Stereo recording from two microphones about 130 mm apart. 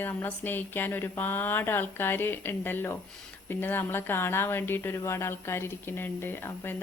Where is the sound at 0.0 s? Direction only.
15° left (ahead or behind).